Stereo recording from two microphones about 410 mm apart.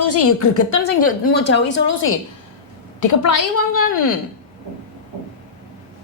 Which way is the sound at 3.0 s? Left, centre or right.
Left.